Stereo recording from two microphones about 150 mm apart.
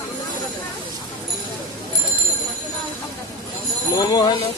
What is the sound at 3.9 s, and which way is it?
Speech, 25° left (ahead or behind).